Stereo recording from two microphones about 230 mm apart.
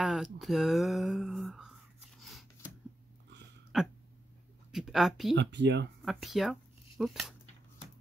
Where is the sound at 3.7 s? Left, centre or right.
Centre.